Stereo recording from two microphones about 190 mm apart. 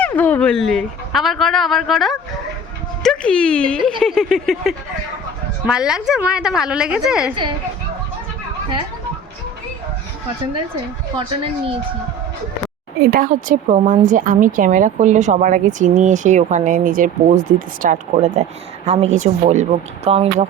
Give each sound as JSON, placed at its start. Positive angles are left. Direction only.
{"t": 0.0, "sound": "speech", "side_deg": 10}
{"t": 11.2, "sound": "speech", "side_deg": -30}
{"t": 13.1, "sound": "speech", "side_deg": -45}